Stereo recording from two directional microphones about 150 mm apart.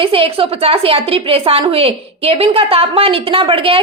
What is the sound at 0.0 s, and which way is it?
A woman's voice, 40° right (ahead or behind).